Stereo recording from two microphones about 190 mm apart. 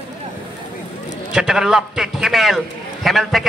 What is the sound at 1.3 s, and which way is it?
A man's voice, 5° right (ahead or behind).